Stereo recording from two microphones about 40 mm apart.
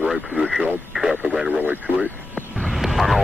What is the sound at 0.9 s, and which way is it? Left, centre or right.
Speech, centre.